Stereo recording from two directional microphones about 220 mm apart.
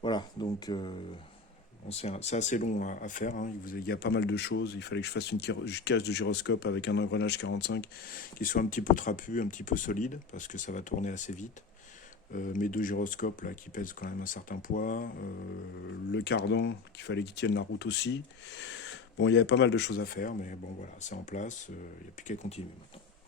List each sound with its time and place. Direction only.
0.0 s speech: 20° left (ahead or behind)